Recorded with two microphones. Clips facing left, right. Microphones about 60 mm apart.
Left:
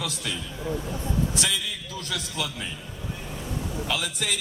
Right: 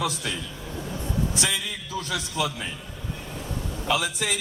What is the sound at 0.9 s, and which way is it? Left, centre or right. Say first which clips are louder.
A man's voice: left 1 dB; centre.